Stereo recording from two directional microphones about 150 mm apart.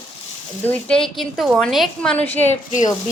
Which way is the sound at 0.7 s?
5° left (ahead or behind).